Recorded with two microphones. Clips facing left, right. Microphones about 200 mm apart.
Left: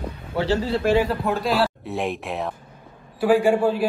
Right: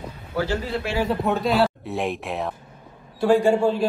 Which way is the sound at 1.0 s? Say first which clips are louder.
Right 1 dB; centre (ahead or behind).